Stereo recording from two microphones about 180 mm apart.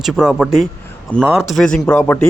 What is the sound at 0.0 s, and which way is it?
A man's voice, 5° right (ahead or behind).